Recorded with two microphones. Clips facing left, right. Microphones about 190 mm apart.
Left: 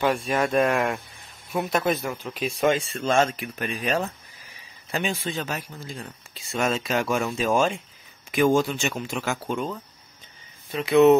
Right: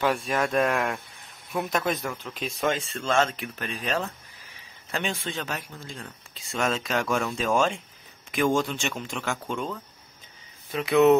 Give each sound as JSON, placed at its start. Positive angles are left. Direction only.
{"t": 0.0, "sound": "speech", "side_deg": 0}